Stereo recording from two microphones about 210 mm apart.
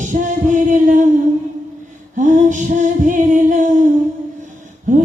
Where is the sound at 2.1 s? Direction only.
35° right (ahead or behind).